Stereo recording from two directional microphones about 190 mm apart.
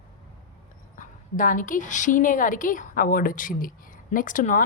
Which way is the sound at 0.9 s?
45° left (ahead or behind).